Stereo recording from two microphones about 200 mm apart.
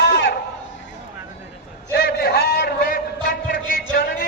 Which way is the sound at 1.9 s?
50° left (ahead or behind).